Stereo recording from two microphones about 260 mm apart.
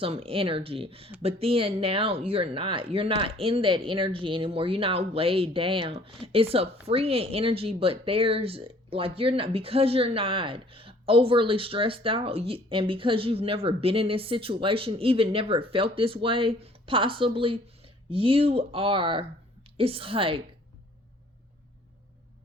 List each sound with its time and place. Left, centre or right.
0.0 s speech: right